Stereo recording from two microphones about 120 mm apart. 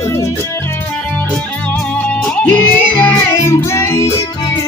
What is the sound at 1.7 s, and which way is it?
Music, 10° left (ahead or behind).